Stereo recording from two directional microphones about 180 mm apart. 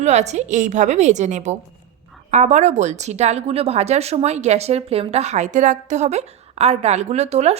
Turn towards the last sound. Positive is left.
turn(degrees=-35)  # may be behind; listen again after turning